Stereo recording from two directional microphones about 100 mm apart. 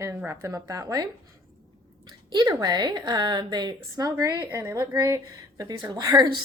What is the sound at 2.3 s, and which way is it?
A woman's voice, 45° right (ahead or behind).